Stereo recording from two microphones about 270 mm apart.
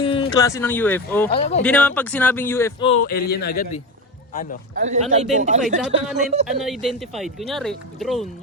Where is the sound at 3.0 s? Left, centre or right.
Left.